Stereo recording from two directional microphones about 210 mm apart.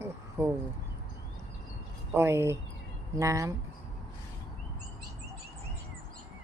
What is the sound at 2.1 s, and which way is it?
Speech, 10° right (ahead or behind).